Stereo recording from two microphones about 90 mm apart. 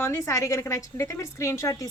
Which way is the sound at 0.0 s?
30° left (ahead or behind).